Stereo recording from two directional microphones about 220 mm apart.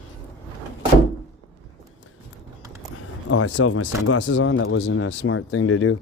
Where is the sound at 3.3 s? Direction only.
60° left (ahead or behind).